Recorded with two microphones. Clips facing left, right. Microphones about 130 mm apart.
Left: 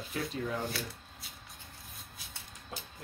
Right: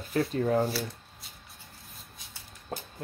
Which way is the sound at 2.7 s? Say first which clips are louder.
Right 7 dB; 45° right (ahead or behind).